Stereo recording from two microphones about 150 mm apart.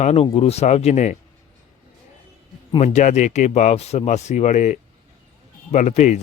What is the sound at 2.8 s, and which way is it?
Speech, 55° left (ahead or behind).